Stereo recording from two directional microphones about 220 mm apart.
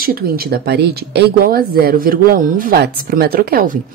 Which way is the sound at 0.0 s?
40° right (ahead or behind).